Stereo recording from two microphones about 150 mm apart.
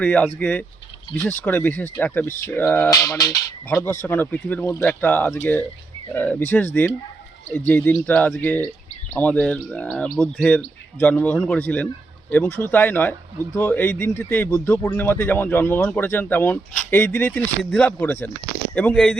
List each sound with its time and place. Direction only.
0.0 s speech: 5° left (ahead or behind)
2.9 s speech: 25° left (ahead or behind); by 19.1 s 5° left (ahead or behind)